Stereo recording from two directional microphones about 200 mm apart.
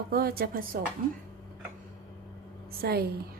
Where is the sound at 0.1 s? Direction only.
50° right (ahead or behind).